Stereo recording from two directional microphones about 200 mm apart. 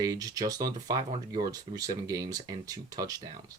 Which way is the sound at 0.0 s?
15° right (ahead or behind).